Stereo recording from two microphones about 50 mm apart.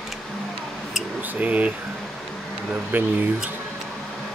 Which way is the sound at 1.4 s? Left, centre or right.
Right.